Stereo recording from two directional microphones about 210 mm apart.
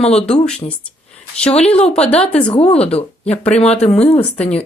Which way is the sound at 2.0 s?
5° left (ahead or behind).